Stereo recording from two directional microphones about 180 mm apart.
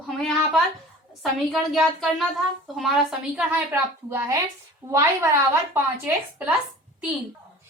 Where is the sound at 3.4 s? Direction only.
10° right (ahead or behind).